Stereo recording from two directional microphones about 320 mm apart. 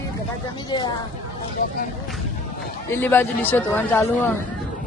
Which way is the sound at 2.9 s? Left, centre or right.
Centre.